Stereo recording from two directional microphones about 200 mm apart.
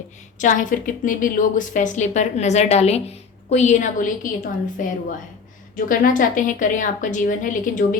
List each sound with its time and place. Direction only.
0.3 s a woman's voice: 40° left (ahead or behind)